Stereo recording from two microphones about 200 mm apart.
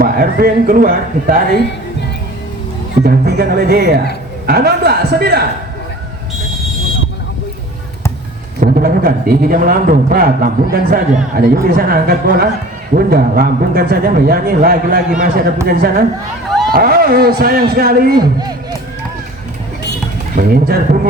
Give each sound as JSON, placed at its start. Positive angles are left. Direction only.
{"t": 0.0, "sound": "a man's voice", "side_deg": -45}
{"t": 3.0, "sound": "a man's voice", "side_deg": -50}
{"t": 8.6, "sound": "a man's voice", "side_deg": -45}
{"t": 18.2, "sound": "speech", "side_deg": -20}
{"t": 20.3, "sound": "a man's voice", "side_deg": -45}